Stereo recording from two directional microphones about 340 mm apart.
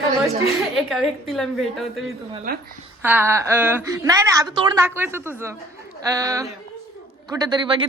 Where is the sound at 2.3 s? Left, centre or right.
Right.